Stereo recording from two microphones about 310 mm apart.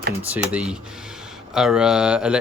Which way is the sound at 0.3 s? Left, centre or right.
Centre.